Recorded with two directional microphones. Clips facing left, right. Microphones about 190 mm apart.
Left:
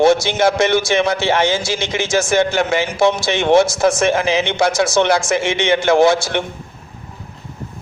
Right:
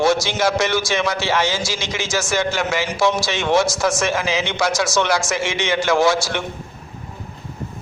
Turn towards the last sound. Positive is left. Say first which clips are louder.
# left 4 dB
turn(degrees=55)  # may be behind; listen again after turning